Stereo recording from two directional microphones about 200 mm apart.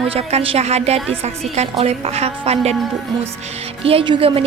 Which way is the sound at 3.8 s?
25° right (ahead or behind).